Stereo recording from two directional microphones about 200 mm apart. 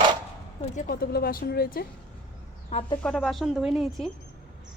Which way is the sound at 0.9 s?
50° left (ahead or behind).